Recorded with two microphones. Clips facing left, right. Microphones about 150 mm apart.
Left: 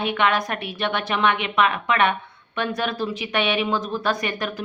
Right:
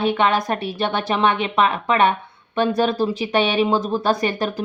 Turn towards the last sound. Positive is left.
turn(degrees=-35)  # may be behind; listen again after turning